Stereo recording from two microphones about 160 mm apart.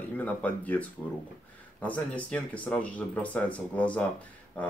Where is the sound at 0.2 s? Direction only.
10° left (ahead or behind).